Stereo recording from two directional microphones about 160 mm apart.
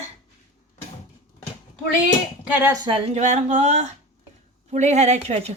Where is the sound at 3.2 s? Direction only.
45° right (ahead or behind).